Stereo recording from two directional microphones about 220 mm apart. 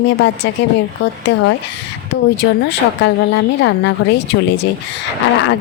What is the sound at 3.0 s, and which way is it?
Speech, 55° left (ahead or behind).